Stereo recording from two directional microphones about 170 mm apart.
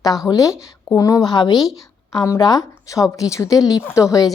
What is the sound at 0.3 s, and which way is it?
A woman's voice, 20° left (ahead or behind).